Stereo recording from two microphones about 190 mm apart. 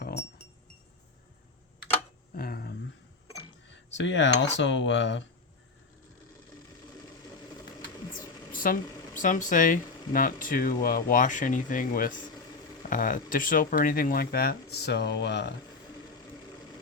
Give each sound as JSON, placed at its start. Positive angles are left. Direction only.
{"t": 0.0, "sound": "wind chime", "side_deg": 60}
{"t": 2.3, "sound": "a sound", "side_deg": 50}
{"t": 3.9, "sound": "speech", "side_deg": 70}
{"t": 8.5, "sound": "speech", "side_deg": 45}